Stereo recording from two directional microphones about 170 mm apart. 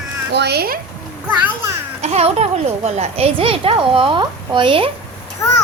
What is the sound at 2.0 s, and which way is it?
A child's voice, 40° right (ahead or behind).